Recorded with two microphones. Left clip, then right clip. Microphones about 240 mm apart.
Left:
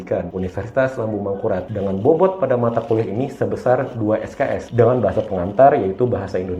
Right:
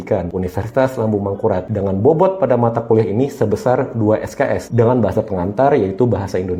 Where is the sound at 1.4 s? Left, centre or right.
Right.